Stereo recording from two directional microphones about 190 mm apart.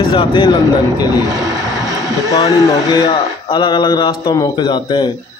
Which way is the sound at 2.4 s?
20° left (ahead or behind).